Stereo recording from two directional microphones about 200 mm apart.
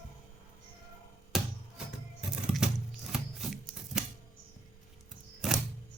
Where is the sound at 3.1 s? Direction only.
Centre (ahead or behind).